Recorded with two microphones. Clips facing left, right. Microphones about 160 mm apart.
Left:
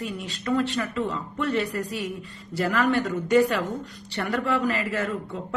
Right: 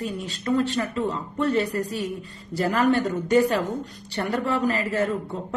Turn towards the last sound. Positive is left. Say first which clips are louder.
# right 2 dB
turn(degrees=-40)  # may be behind; listen again after turning